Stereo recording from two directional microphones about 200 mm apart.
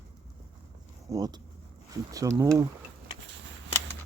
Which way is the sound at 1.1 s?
20° right (ahead or behind).